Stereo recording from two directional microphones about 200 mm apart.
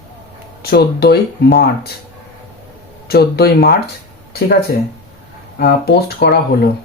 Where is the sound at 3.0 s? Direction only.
50° left (ahead or behind).